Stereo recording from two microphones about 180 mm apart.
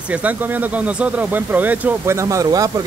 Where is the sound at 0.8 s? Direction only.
10° right (ahead or behind).